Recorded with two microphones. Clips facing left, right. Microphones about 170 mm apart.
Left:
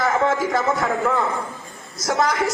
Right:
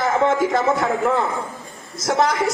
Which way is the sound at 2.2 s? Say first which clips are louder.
Right 1 dB; 30° right (ahead or behind).